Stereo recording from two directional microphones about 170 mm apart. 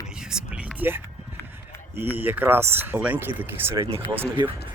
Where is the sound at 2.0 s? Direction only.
10° right (ahead or behind).